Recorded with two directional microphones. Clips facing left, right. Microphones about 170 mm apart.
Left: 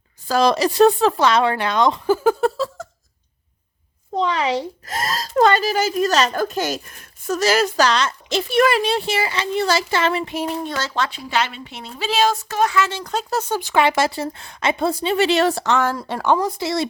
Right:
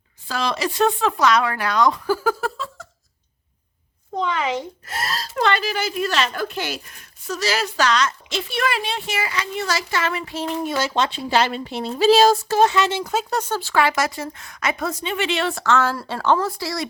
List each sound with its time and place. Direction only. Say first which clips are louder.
0.3 s speech: left 7 dB; 40° left (ahead or behind); by 2.5 s 25° left (ahead or behind)
2.8 s a sound: left 8 dB; 45° left (ahead or behind)
4.2 s speech: left 3 dB; 35° left (ahead or behind)
7.9 s a woman's voice: left 1 dB; 30° left (ahead or behind)
8.4 s speech: left 7 dB; 45° left (ahead or behind)
10.3 s speech: left 2 dB; 10° left (ahead or behind)
10.6 s speech: right 2 dB; 10° right (ahead or behind)
13.5 s speech: left 3 dB; 15° left (ahead or behind); by 15.6 s 40° left (ahead or behind)
15.6 s speech: even; 15° left (ahead or behind)